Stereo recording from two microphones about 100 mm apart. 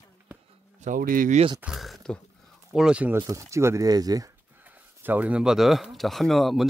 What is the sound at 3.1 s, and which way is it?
Speech, 30° right (ahead or behind).